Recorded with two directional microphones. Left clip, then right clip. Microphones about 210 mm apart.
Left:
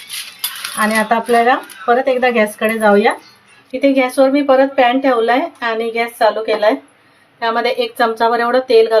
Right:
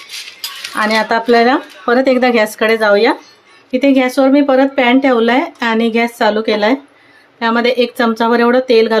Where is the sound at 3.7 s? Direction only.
35° right (ahead or behind).